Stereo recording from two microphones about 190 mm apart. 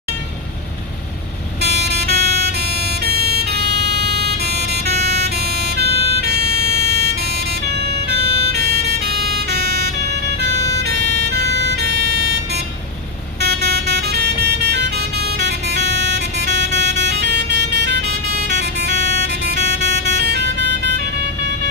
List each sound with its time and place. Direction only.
1.6 s vehicle: 60° right (ahead or behind)
8.5 s vehicle: 60° right (ahead or behind)
10.8 s emergency vehicle: 60° right (ahead or behind)
13.4 s vehicle: 60° right (ahead or behind)